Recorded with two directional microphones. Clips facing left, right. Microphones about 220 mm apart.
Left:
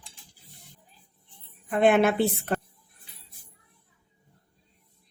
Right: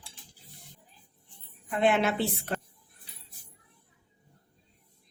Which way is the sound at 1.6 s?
50° left (ahead or behind).